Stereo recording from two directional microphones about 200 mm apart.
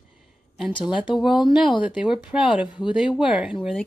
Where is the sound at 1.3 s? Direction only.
25° left (ahead or behind).